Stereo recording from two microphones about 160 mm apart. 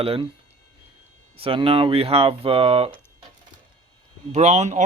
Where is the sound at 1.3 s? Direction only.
35° right (ahead or behind).